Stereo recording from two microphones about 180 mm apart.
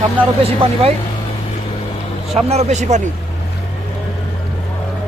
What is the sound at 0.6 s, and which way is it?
Speech, 30° right (ahead or behind).